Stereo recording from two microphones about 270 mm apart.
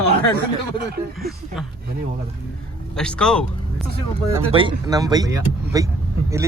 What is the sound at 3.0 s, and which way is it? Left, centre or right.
Speech, centre.